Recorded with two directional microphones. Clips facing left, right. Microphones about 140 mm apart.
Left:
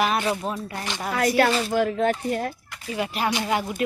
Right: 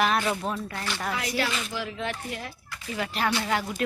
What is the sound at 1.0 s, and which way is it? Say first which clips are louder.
Speech: left 10 dB; 50° left (ahead or behind).